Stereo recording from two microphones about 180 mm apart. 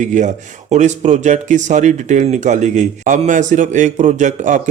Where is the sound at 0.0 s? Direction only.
40° right (ahead or behind).